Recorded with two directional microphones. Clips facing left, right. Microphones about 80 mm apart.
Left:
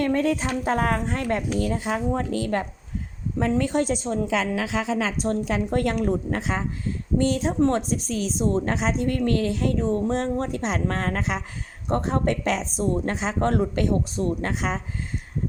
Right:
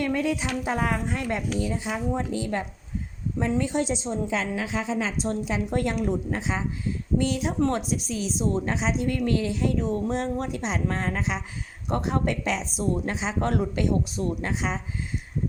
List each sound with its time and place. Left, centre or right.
0.0 s speech: left
1.5 s a woman's voice: left
11.9 s speech: left